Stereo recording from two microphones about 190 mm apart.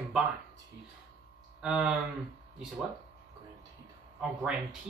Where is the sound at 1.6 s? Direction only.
5° right (ahead or behind).